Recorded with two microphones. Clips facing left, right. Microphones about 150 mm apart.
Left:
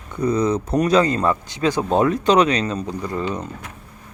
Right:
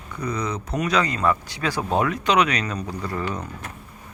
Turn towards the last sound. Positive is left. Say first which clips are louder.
# left 3 dB
turn(degrees=20)  # may be behind; listen again after turning